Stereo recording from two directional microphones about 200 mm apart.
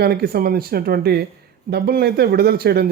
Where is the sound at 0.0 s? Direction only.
50° right (ahead or behind).